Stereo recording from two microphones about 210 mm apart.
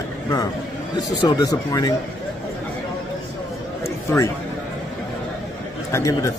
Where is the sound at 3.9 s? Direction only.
15° left (ahead or behind).